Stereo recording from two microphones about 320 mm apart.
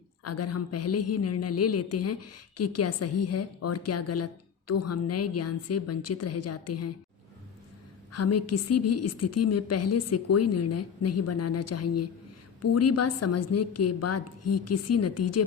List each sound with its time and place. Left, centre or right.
0.3 s a woman's voice: left
8.1 s a woman's voice: left